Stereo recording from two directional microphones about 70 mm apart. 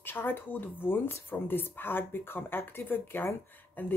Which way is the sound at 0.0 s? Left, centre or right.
Left.